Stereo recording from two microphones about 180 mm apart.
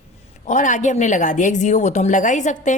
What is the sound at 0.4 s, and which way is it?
A woman's voice, 45° left (ahead or behind).